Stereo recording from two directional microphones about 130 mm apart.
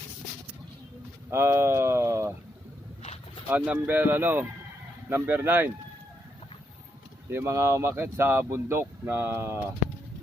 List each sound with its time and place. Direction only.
1.3 s speech: 20° right (ahead or behind)
3.5 s speech: 15° right (ahead or behind)
7.3 s speech: 20° right (ahead or behind)